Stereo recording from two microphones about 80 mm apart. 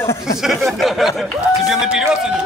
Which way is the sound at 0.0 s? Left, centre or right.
Left.